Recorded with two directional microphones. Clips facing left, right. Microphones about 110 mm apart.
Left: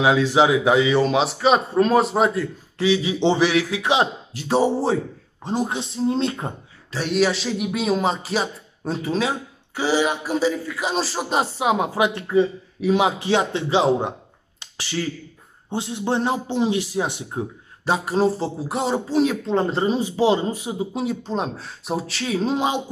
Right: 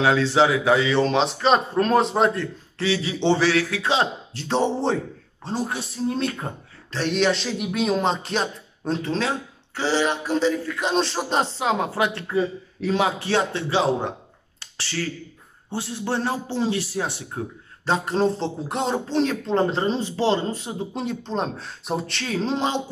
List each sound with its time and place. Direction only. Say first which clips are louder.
0.0 s a man's voice: left 1 dB; 15° left (ahead or behind)
6.9 s a man's voice: left 1 dB; 5° left (ahead or behind)
14.6 s finger snapping: left 2 dB; 15° left (ahead or behind)
15.7 s a man's voice: left 3 dB; 20° left (ahead or behind)